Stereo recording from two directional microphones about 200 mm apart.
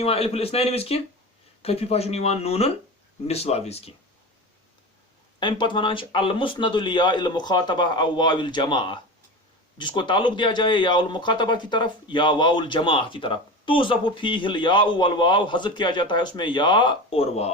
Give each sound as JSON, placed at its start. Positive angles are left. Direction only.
{"t": 0.0, "sound": "speech", "side_deg": 30}
{"t": 5.4, "sound": "speech", "side_deg": 25}